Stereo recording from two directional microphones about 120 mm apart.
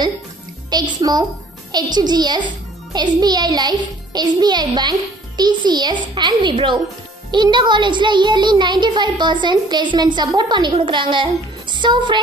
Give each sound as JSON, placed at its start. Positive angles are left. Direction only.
{"t": 0.7, "sound": "speech", "side_deg": -35}